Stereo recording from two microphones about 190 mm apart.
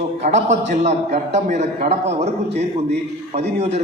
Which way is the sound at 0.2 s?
35° right (ahead or behind).